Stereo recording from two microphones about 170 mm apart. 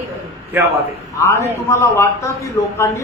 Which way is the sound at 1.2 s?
15° left (ahead or behind).